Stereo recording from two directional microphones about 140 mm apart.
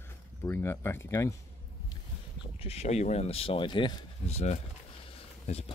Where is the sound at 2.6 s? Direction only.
50° left (ahead or behind).